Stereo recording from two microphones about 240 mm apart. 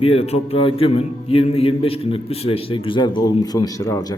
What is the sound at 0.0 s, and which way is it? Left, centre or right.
Speech, left.